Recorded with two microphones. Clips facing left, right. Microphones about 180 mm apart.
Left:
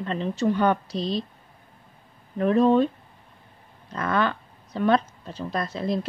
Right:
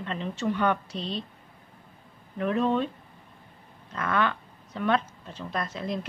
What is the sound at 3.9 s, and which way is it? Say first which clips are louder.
Speech: left 3 dB; 35° left (ahead or behind).